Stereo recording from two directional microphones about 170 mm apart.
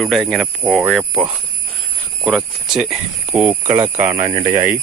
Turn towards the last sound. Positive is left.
turn(degrees=-50)  # may be behind; listen again after turning